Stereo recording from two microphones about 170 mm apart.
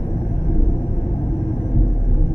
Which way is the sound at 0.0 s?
30° left (ahead or behind).